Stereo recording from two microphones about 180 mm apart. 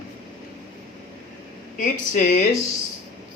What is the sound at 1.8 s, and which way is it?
Speech, 45° left (ahead or behind).